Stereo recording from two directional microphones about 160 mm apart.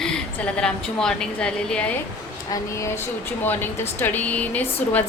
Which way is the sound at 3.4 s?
10° left (ahead or behind).